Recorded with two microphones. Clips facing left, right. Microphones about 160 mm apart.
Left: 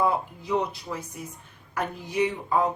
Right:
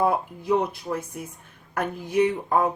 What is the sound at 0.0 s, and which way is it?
A woman's voice, 55° right (ahead or behind).